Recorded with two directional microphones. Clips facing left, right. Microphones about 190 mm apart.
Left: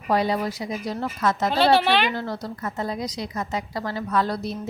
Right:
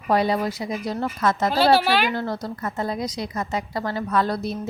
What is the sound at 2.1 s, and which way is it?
A woman's voice, 55° right (ahead or behind).